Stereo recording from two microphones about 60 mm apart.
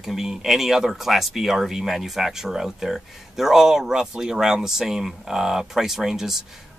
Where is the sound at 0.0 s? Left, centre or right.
Centre.